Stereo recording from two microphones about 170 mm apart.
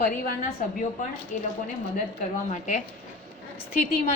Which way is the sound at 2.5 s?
45° left (ahead or behind).